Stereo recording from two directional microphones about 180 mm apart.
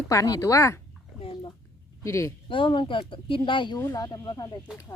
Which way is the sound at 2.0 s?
15° left (ahead or behind).